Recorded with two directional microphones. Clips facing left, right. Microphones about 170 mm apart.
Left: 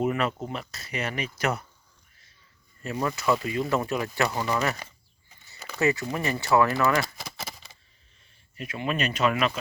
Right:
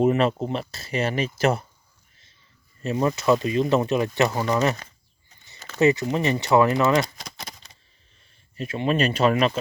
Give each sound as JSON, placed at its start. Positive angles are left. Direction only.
{"t": 0.0, "sound": "speech", "side_deg": -30}
{"t": 2.8, "sound": "speech", "side_deg": -25}
{"t": 5.8, "sound": "speech", "side_deg": -20}
{"t": 7.0, "sound": "a sound", "side_deg": 5}
{"t": 8.5, "sound": "speech", "side_deg": -30}